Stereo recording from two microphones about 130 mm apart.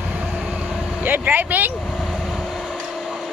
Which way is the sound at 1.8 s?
Centre (ahead or behind).